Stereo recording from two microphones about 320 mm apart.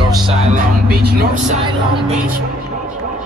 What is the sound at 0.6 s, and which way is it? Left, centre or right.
Music, right.